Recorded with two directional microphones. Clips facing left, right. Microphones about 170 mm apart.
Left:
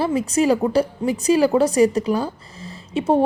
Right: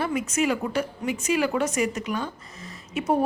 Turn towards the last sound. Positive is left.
turn(degrees=30)  # may be behind; listen again after turning